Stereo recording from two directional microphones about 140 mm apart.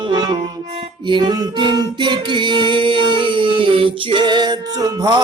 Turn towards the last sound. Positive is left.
turn(degrees=-30)  # may be behind; listen again after turning